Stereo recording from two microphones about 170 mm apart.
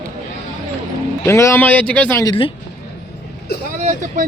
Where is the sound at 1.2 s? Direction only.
15° left (ahead or behind).